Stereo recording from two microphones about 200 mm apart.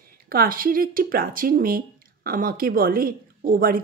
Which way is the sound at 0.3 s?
45° right (ahead or behind).